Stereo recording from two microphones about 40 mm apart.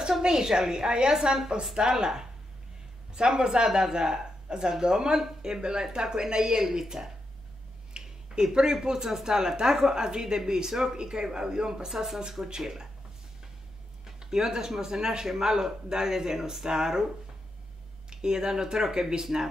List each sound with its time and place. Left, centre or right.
0.2 s speech: centre
14.2 s speech: centre
18.1 s speech: centre